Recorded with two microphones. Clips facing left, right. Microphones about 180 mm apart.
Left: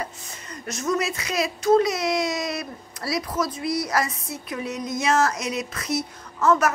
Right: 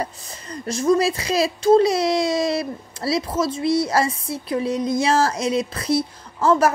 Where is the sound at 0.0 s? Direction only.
35° right (ahead or behind).